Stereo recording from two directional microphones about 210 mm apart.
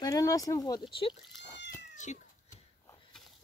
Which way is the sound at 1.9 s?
35° left (ahead or behind).